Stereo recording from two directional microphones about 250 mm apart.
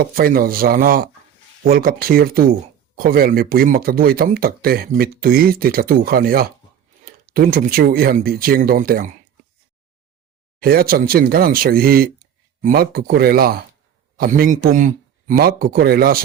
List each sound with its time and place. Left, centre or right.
0.0 s speech: right
10.6 s speech: right